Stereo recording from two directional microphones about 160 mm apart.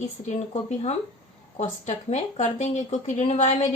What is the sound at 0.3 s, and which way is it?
Speech, 40° left (ahead or behind).